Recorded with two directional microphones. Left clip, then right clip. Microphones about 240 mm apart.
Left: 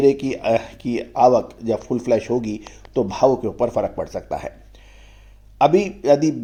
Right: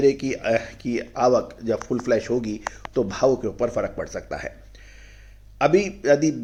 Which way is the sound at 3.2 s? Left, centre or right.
Left.